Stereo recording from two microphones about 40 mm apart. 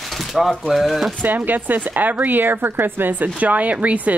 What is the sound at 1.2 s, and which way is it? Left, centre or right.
Speech, right.